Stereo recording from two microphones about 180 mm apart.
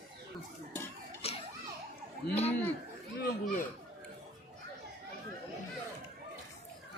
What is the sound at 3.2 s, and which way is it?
Speech, 60° left (ahead or behind).